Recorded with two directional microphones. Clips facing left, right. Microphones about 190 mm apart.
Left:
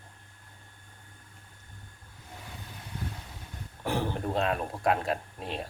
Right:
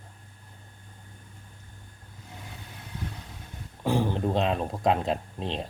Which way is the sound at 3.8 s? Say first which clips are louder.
Right 5 dB; 15° right (ahead or behind).